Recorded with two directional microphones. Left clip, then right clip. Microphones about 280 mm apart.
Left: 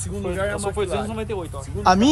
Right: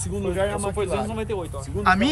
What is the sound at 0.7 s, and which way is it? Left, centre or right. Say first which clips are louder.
Speech: left 1 dB; centre.